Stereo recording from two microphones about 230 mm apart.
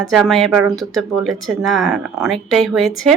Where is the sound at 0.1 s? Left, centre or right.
Centre.